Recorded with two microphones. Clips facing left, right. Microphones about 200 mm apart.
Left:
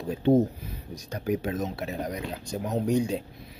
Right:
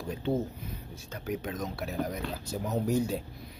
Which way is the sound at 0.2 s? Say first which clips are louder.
Left 10 dB; 40° left (ahead or behind).